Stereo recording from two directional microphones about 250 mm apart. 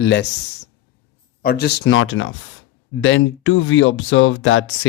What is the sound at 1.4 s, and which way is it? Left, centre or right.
Speech, left.